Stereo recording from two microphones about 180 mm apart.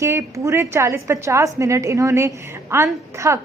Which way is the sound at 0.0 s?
15° right (ahead or behind).